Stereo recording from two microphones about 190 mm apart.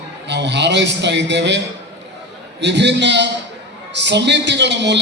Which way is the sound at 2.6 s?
65° right (ahead or behind).